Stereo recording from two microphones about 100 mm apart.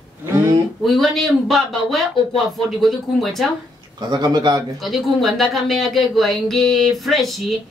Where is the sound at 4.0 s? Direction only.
45° right (ahead or behind).